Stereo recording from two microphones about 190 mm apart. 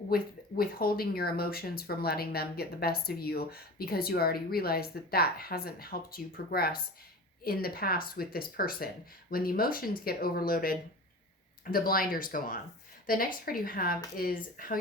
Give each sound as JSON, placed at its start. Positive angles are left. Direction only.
{"t": 0.1, "sound": "speech", "side_deg": 50}